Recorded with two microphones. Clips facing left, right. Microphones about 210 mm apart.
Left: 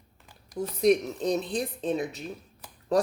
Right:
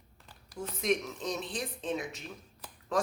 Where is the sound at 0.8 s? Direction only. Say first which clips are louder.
Left 9 dB; 35° left (ahead or behind).